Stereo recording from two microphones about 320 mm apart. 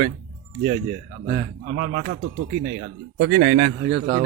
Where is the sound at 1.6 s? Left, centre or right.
Right.